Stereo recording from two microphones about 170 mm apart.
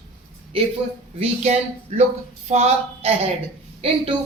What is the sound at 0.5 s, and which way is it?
A woman's voice, 30° right (ahead or behind).